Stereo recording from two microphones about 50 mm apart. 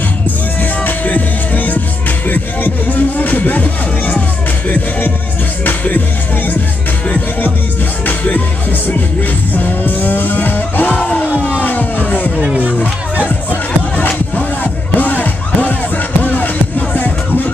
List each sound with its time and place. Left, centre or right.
0.6 s music: left
8.1 s music: left
9.5 s music: left
13.5 s music: left